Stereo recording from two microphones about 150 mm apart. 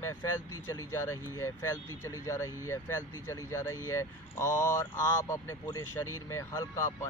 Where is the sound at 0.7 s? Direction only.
20° left (ahead or behind).